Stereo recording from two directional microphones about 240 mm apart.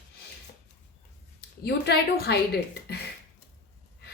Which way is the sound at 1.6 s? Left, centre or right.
Left.